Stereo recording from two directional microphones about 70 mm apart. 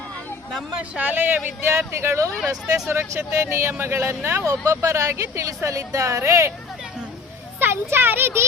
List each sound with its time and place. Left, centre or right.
0.8 s speech: right
1.9 s speech: right
4.4 s speech: right
7.6 s speech: right